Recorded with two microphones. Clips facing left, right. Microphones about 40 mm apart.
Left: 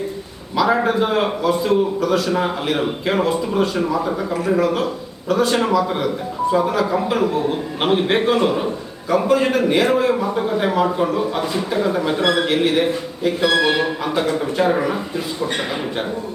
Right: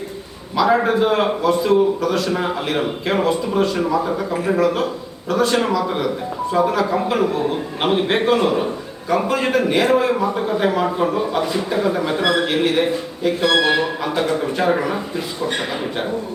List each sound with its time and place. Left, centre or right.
0.5 s a man's voice: centre